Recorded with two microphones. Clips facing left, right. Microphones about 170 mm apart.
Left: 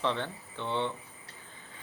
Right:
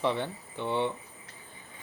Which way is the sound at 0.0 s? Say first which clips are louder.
Right 3 dB; 10° right (ahead or behind).